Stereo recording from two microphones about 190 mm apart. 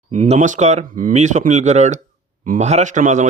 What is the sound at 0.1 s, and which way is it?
A man's voice, 40° right (ahead or behind).